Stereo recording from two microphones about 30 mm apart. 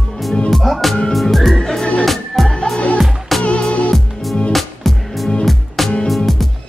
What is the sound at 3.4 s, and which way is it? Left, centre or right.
Music, left.